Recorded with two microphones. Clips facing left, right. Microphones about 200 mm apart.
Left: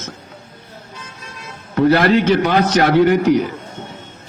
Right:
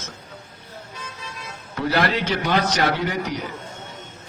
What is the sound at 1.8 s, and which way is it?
A man's voice, 50° left (ahead or behind).